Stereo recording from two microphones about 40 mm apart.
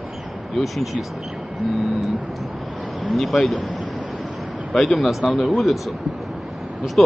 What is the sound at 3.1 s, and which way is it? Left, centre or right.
Speech, centre.